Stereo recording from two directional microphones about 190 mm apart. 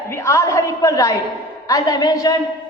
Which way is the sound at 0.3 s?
15° left (ahead or behind).